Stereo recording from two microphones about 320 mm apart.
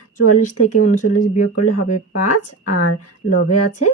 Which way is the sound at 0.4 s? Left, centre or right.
Left.